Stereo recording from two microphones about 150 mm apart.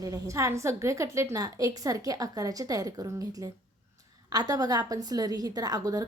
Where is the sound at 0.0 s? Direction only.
20° right (ahead or behind).